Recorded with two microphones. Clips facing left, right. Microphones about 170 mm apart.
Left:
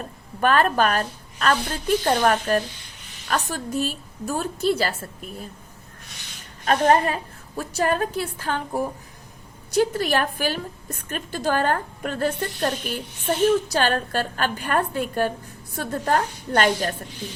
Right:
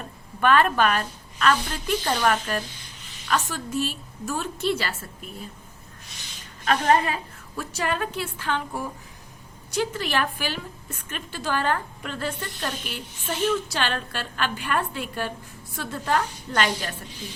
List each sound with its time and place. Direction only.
0.4 s a woman's voice: 40° left (ahead or behind)
6.7 s a woman's voice: 40° left (ahead or behind)